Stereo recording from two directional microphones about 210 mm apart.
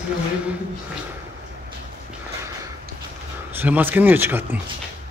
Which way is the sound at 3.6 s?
10° right (ahead or behind).